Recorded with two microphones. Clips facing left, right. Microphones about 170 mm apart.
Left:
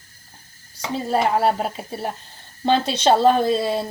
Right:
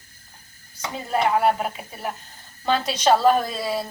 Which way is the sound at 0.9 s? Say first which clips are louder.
Left 2 dB; 35° left (ahead or behind).